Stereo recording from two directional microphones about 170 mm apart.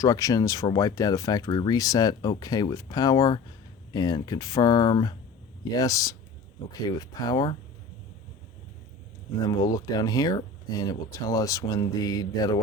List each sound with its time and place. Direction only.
0.0 s speech: 20° left (ahead or behind)
9.4 s speech: 20° left (ahead or behind)